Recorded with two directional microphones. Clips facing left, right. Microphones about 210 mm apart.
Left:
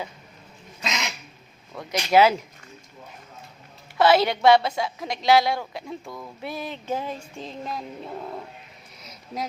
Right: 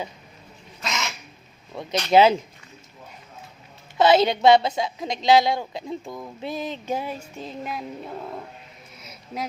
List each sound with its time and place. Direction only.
0.9 s bird: 20° left (ahead or behind)
1.7 s a woman's voice: 25° right (ahead or behind)
3.9 s a woman's voice: 20° right (ahead or behind); by 8.4 s centre (ahead or behind)